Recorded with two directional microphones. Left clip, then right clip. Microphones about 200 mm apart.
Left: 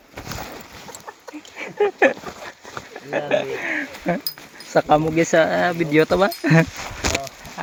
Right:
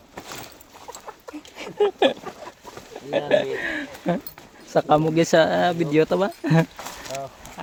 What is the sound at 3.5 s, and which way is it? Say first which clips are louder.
Speech: left 3 dB; 15° right (ahead or behind).